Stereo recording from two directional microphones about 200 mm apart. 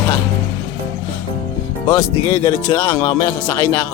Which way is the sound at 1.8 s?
20° left (ahead or behind).